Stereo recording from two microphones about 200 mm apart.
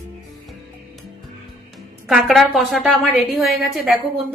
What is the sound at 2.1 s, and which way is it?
A woman's voice, centre (ahead or behind).